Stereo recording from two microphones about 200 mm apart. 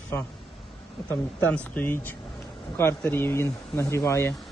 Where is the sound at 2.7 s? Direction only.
10° left (ahead or behind).